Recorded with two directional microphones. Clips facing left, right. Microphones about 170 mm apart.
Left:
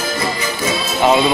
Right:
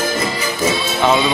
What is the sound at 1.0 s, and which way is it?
Speech, 10° left (ahead or behind).